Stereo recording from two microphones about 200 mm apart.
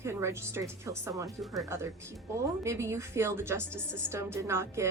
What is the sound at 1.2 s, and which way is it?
Speech, centre (ahead or behind).